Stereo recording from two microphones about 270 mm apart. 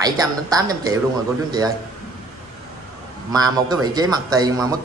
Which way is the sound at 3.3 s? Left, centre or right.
Centre.